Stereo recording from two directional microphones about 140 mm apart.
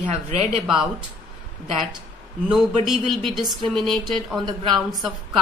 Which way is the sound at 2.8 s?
Centre (ahead or behind).